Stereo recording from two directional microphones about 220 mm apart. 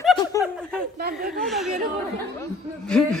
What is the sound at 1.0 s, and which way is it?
Chuckle, 45° right (ahead or behind).